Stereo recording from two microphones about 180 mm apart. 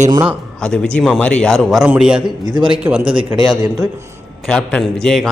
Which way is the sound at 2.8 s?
10° right (ahead or behind).